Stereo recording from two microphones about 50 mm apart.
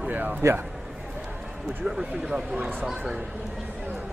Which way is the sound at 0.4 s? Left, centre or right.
Right.